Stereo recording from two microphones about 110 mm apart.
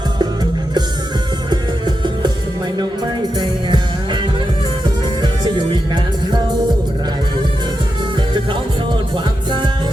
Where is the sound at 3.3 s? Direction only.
45° right (ahead or behind).